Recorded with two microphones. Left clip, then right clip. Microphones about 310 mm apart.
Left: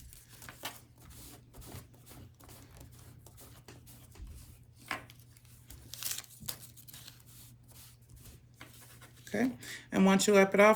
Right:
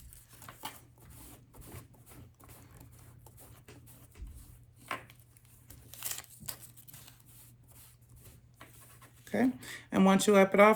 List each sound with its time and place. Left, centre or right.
5.6 s crumpling: centre
9.0 s speech: centre